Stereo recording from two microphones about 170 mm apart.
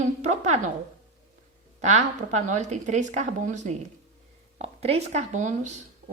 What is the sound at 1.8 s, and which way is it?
Speech, 45° right (ahead or behind).